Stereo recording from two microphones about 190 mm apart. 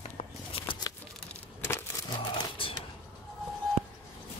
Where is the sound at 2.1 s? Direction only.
25° left (ahead or behind).